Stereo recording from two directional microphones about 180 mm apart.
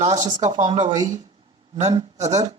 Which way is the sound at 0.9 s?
20° right (ahead or behind).